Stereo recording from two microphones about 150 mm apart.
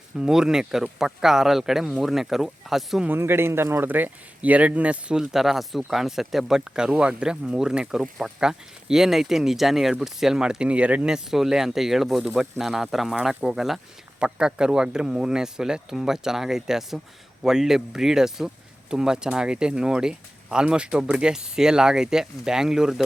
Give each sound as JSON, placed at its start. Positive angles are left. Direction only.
{"t": 0.2, "sound": "speech", "side_deg": -5}
{"t": 3.1, "sound": "speech", "side_deg": -15}